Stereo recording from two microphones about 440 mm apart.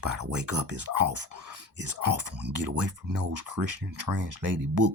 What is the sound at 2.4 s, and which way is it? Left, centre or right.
Speech, right.